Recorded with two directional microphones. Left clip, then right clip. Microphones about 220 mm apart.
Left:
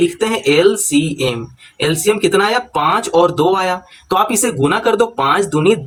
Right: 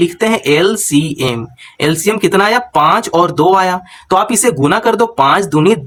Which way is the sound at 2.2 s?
30° right (ahead or behind).